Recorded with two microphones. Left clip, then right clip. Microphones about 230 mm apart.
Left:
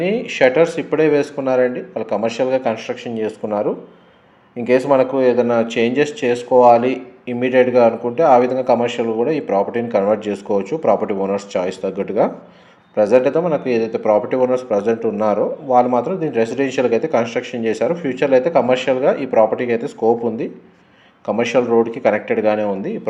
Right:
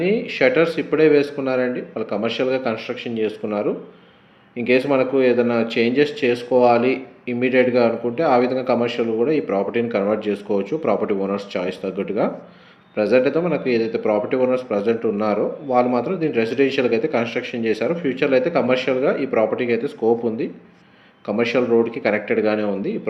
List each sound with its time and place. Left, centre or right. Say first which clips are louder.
0.0 s a man's voice: left 3 dB; left
4.9 s a man's voice: left 3 dB; left